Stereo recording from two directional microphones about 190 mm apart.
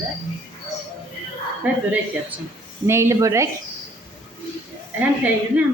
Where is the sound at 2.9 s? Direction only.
15° right (ahead or behind).